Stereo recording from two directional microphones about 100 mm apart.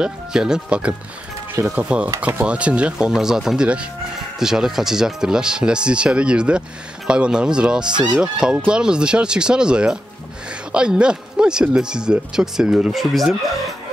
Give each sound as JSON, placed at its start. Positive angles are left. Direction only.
{"t": 0.0, "sound": "speech", "side_deg": -5}
{"t": 1.5, "sound": "speech", "side_deg": -20}